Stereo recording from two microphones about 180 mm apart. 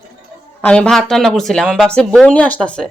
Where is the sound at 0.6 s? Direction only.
5° left (ahead or behind).